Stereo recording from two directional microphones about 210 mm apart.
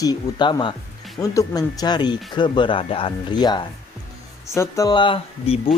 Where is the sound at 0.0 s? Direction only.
20° left (ahead or behind).